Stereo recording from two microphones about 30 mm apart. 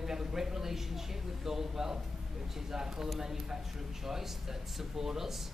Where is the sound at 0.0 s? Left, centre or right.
Centre.